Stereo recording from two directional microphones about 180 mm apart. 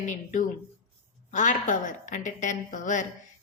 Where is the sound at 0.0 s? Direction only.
45° left (ahead or behind).